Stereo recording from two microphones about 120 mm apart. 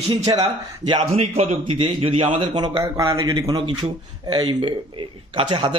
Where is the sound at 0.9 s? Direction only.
60° right (ahead or behind).